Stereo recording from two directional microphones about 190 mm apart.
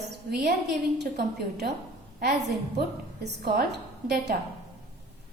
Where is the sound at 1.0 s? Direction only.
60° right (ahead or behind).